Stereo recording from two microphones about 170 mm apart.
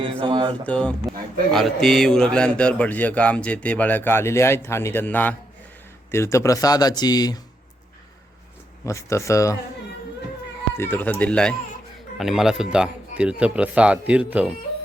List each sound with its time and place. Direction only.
0.0 s speech: 30° right (ahead or behind)
0.6 s a man's voice: 5° left (ahead or behind); by 7.3 s 25° left (ahead or behind)
8.9 s a man's voice: 15° left (ahead or behind)
10.8 s a man's voice: 10° left (ahead or behind); by 14.5 s 10° right (ahead or behind)